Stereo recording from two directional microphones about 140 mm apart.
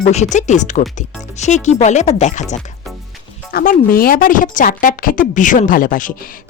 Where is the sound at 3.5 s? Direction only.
90° left.